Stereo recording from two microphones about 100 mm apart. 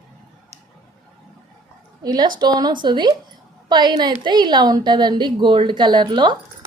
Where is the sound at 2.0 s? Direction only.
45° right (ahead or behind).